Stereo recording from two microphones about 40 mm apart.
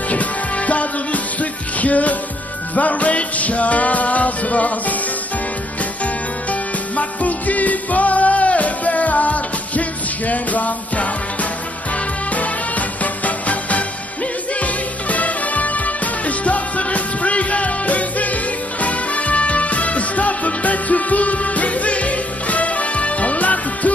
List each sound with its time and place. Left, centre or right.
0.1 s music: left
7.0 s music: left
12.3 s music: left